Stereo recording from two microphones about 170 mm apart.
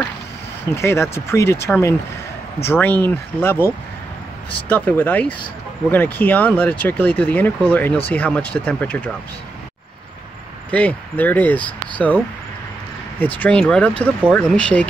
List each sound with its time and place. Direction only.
0.7 s speech: 15° left (ahead or behind)
10.7 s speech: 10° left (ahead or behind)
13.2 s speech: 10° left (ahead or behind)